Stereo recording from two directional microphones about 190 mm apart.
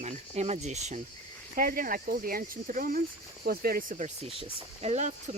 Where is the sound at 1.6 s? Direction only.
50° right (ahead or behind).